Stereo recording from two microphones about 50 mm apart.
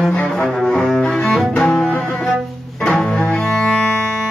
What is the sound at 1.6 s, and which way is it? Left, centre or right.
Music, centre.